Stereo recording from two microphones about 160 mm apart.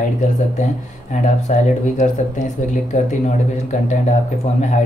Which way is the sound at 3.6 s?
50° left (ahead or behind).